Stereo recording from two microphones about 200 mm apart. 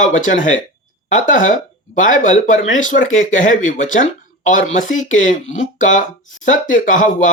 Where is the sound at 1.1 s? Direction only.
40° left (ahead or behind).